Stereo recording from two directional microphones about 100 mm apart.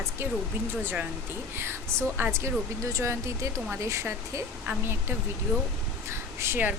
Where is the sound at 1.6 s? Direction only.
25° right (ahead or behind).